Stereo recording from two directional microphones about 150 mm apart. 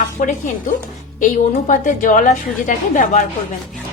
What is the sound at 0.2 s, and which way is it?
A woman's voice, 60° left (ahead or behind).